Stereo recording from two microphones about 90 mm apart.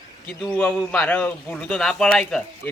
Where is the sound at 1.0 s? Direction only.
20° left (ahead or behind).